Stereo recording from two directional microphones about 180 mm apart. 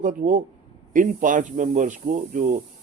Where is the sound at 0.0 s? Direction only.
50° right (ahead or behind).